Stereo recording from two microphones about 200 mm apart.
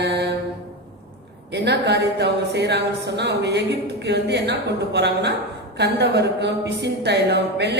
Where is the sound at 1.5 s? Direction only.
60° right (ahead or behind).